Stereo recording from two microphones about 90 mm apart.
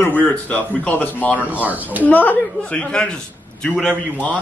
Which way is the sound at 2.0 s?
15° left (ahead or behind).